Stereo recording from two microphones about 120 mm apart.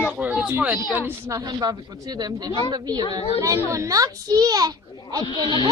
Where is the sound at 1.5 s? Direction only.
35° right (ahead or behind).